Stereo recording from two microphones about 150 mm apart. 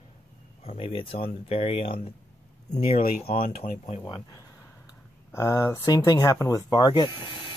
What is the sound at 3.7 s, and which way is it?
Speech, 50° left (ahead or behind).